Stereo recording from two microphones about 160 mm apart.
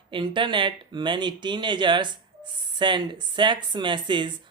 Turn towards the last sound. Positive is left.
turn(degrees=-30)  # may be behind; listen again after turning